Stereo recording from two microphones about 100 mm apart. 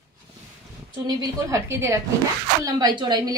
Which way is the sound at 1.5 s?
30° right (ahead or behind).